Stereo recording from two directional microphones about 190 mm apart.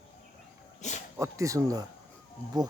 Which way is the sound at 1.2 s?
15° right (ahead or behind).